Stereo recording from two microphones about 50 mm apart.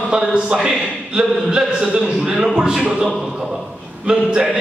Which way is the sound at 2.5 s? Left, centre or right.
Centre.